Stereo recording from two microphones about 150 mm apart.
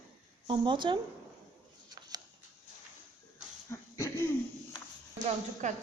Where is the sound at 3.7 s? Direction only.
20° left (ahead or behind).